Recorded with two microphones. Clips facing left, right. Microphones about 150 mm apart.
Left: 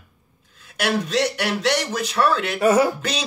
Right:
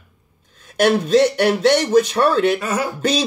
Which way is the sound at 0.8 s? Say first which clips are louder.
Right 7 dB; 40° right (ahead or behind).